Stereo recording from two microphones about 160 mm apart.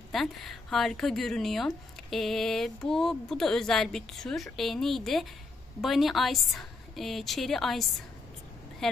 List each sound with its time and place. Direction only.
0.1 s a woman's voice: centre (ahead or behind)